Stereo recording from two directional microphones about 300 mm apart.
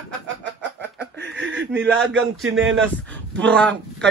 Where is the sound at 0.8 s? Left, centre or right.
Right.